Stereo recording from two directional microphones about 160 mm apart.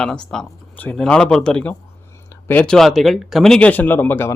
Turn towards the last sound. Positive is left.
turn(degrees=15)  # may be behind; listen again after turning